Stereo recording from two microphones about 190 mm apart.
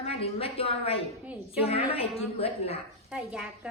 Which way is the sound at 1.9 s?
30° left (ahead or behind).